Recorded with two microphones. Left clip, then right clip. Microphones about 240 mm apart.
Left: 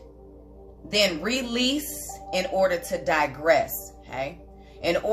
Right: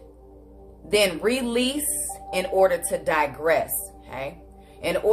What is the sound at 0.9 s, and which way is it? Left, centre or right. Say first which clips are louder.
A woman's voice: right 2 dB; centre.